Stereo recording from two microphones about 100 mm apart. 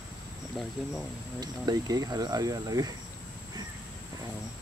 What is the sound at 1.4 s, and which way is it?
Speech, 40° right (ahead or behind).